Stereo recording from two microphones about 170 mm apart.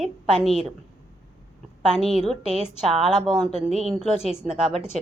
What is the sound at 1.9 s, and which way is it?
A woman's voice, centre (ahead or behind).